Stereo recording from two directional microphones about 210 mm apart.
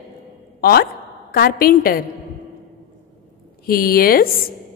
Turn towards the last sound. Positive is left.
turn(degrees=45)  # may be behind; listen again after turning